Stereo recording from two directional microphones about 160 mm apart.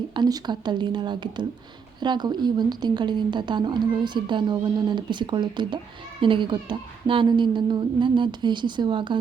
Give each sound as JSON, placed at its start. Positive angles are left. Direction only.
{"t": 0.1, "sound": "a woman's voice", "side_deg": -25}